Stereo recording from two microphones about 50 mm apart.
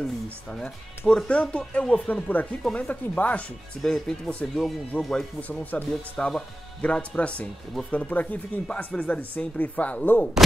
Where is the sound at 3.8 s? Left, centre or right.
Centre.